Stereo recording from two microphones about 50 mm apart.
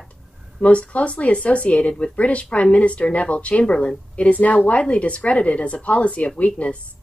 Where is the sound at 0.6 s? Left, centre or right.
Left.